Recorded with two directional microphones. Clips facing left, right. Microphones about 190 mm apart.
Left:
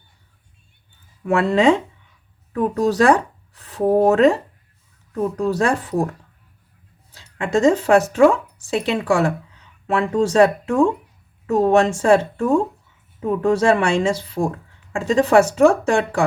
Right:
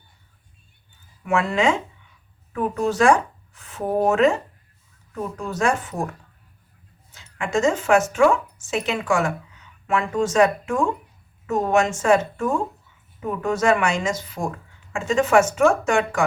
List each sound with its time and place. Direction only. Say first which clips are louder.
1.2 s a woman's voice: left 5 dB; 35° left (ahead or behind)
7.1 s a woman's voice: left 4 dB; 35° left (ahead or behind)